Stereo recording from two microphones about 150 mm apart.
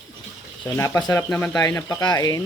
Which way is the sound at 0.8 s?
15° left (ahead or behind).